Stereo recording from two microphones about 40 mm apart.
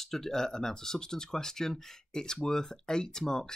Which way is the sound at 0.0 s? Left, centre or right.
Centre.